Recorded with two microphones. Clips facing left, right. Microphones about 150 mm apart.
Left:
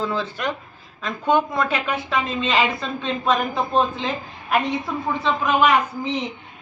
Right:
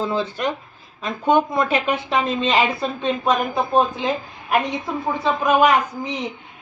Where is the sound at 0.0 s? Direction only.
20° right (ahead or behind).